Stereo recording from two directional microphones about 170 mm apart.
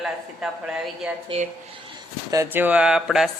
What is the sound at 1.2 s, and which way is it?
Speech, 40° right (ahead or behind).